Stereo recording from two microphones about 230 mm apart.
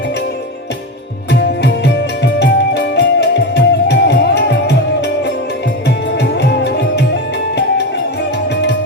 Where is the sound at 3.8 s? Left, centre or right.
Left.